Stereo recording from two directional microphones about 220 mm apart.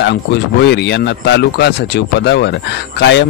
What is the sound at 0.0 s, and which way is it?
Speech, 50° left (ahead or behind).